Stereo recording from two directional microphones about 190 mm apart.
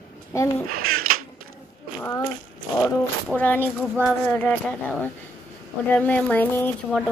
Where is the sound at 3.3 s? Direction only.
10° left (ahead or behind).